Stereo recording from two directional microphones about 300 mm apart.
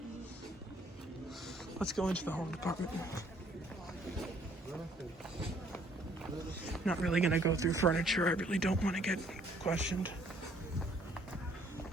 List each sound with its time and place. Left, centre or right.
1.8 s speech: centre
6.7 s speech: centre
7.9 s speech: centre